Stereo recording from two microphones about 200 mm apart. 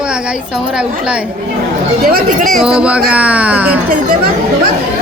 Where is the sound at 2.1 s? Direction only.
45° right (ahead or behind).